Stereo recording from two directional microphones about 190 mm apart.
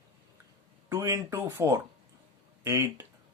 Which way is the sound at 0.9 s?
20° right (ahead or behind).